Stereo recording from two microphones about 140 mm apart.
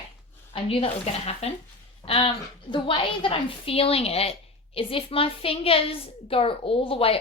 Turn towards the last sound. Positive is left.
turn(degrees=45)  # may be behind; listen again after turning